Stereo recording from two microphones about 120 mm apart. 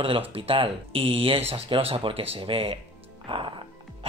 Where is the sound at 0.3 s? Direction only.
50° right (ahead or behind).